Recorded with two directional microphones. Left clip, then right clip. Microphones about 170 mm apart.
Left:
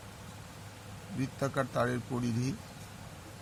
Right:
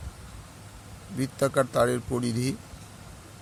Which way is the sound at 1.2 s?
50° right (ahead or behind).